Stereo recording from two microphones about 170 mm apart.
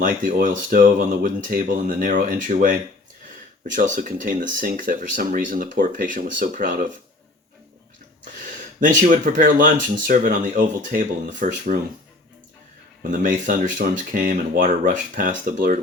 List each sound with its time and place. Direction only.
0.0 s speech: 55° right (ahead or behind)
8.8 s speech: 50° right (ahead or behind)
13.1 s speech: 50° right (ahead or behind)